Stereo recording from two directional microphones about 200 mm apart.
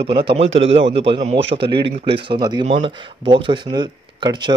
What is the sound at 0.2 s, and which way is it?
Speech, 25° right (ahead or behind).